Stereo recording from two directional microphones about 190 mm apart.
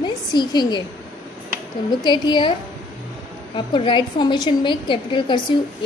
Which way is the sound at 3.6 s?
25° left (ahead or behind).